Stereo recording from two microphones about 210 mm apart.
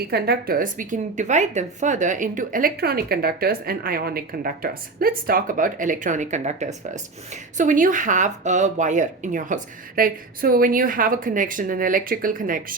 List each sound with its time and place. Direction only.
0.0 s a woman's voice: 50° right (ahead or behind)